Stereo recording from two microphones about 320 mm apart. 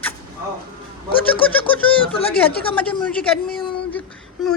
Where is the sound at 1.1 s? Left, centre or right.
Centre.